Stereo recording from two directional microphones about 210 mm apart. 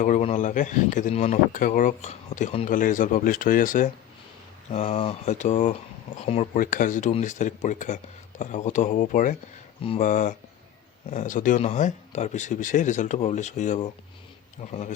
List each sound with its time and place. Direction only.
0.0 s speech: 35° left (ahead or behind)